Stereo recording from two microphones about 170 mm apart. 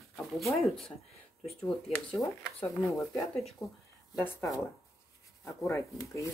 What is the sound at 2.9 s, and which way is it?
Speech, 20° left (ahead or behind).